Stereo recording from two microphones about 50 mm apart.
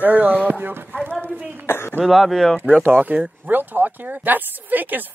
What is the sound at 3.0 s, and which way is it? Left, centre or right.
Speech, right.